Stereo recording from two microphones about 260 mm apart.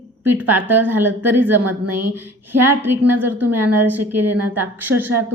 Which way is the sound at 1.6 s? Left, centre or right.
Right.